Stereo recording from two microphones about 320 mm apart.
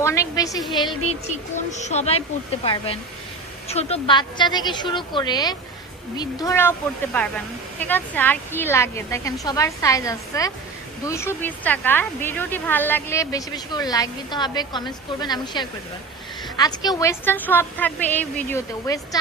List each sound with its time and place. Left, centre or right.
0.0 s a woman's voice: centre
1.5 s a woman's voice: left